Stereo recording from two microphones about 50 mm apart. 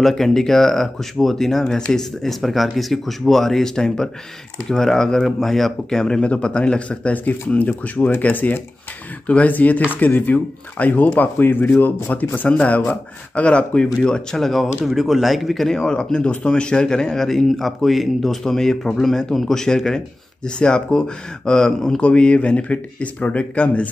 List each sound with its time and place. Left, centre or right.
0.0 s speech: centre
6.2 s speech: left
22.0 s speech: left